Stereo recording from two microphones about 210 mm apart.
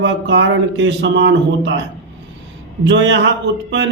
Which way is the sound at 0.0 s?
60° right (ahead or behind).